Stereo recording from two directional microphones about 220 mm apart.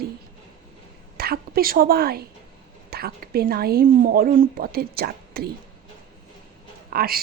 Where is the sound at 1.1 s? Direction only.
45° right (ahead or behind).